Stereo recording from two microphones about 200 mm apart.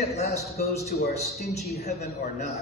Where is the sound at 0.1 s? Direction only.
35° left (ahead or behind).